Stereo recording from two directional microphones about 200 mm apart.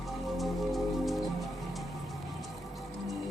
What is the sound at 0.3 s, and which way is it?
Rain on surface, centre (ahead or behind).